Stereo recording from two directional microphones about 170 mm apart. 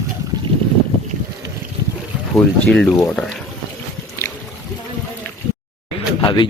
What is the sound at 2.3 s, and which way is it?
Speech, centre (ahead or behind).